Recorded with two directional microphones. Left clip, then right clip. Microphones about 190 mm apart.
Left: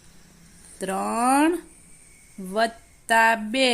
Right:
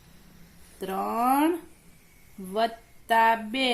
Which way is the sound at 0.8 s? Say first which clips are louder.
Left 2 dB; 35° left (ahead or behind).